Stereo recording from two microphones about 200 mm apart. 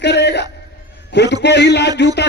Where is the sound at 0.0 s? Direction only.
55° left (ahead or behind).